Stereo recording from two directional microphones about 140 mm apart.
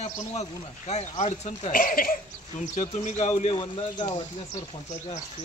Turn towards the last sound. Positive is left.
turn(degrees=30)  # may be behind; listen again after turning